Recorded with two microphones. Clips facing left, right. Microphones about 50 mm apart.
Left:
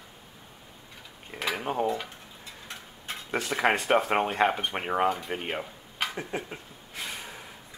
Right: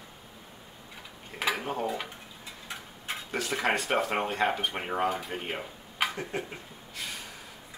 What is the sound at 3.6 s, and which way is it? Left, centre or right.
Speech, centre.